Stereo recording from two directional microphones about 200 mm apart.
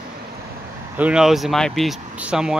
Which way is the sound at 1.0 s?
5° right (ahead or behind).